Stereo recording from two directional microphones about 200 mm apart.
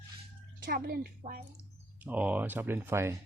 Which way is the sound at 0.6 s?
50° right (ahead or behind).